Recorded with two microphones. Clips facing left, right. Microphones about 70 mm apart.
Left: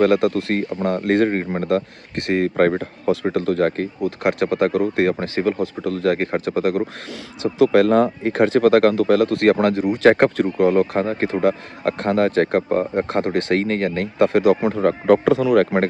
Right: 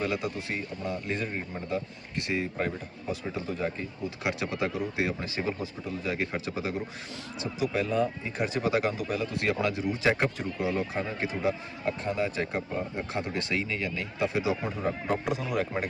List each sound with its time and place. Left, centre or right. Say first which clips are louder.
0.0 s speech: left 15 dB; left
3.2 s speech: left 12 dB; left
7.4 s speech: left 15 dB; left